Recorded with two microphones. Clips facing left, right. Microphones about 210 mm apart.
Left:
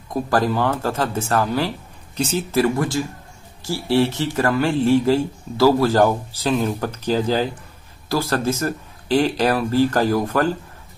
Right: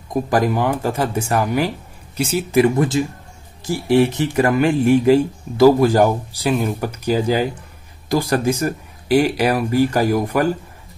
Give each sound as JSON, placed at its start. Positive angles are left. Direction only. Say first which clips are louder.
{"t": 0.1, "sound": "speech", "louder": "right 2 dB", "side_deg": -15}
{"t": 2.6, "sound": "speech", "louder": "right 4 dB", "side_deg": -20}